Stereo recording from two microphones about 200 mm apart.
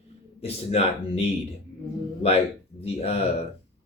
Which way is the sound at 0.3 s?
30° left (ahead or behind).